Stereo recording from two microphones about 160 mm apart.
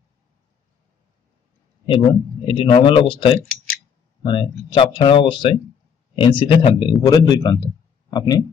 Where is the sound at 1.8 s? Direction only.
35° left (ahead or behind).